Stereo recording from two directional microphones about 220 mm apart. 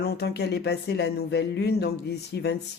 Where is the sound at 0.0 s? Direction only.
50° left (ahead or behind).